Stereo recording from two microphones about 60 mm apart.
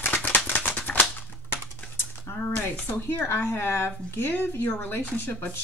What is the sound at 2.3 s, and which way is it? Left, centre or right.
Speech, left.